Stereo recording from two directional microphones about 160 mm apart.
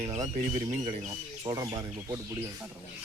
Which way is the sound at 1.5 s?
20° right (ahead or behind).